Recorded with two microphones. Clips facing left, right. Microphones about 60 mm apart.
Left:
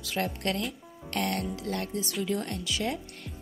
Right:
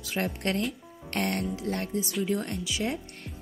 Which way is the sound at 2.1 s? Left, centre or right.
Centre.